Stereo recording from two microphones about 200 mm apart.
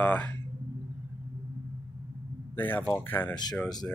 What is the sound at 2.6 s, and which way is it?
Speech, 10° left (ahead or behind).